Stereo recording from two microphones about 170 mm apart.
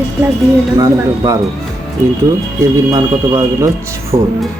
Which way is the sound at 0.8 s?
20° right (ahead or behind).